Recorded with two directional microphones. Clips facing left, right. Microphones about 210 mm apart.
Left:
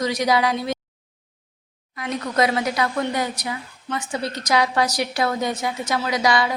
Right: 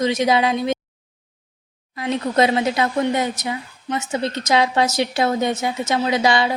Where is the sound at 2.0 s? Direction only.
25° right (ahead or behind).